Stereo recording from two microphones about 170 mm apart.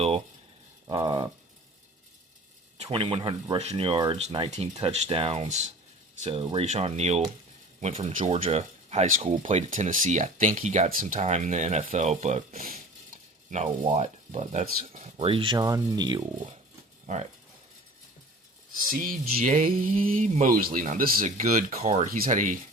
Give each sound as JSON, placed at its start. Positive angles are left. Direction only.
{"t": 0.9, "sound": "speech", "side_deg": -25}
{"t": 2.7, "sound": "speech", "side_deg": -35}
{"t": 13.5, "sound": "speech", "side_deg": -40}
{"t": 17.1, "sound": "speech", "side_deg": -45}
{"t": 18.9, "sound": "speech", "side_deg": -55}